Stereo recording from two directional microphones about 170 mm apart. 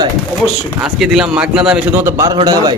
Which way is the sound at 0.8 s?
5° right (ahead or behind).